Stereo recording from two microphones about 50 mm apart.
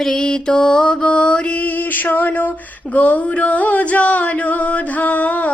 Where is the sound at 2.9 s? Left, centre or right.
Left.